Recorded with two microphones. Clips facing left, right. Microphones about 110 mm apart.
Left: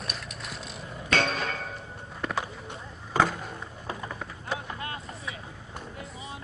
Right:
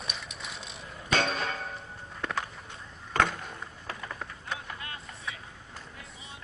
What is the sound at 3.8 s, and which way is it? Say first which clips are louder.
Run: left 5 dB; 20° left (ahead or behind).